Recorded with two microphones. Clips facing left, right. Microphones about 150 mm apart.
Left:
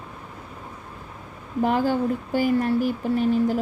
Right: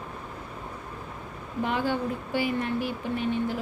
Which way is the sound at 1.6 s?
40° left (ahead or behind).